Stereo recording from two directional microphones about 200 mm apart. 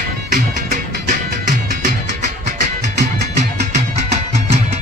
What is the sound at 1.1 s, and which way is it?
Music, 40° right (ahead or behind).